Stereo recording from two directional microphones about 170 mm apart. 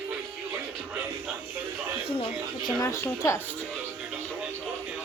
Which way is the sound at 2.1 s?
35° left (ahead or behind).